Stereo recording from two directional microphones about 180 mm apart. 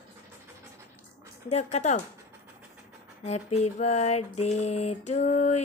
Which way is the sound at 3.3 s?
35° left (ahead or behind).